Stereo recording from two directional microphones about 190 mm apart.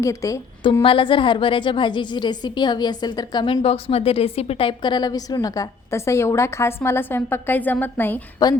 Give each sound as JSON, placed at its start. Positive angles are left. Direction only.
{"t": 0.0, "sound": "a woman's voice", "side_deg": 15}
{"t": 8.4, "sound": "a woman's voice", "side_deg": 20}